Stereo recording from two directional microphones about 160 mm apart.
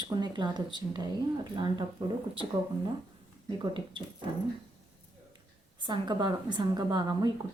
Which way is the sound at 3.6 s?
30° right (ahead or behind).